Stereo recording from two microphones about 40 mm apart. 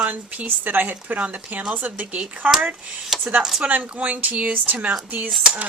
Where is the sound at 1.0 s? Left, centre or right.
Right.